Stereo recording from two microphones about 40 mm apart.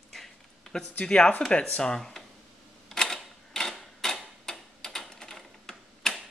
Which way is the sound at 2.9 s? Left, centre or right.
Centre.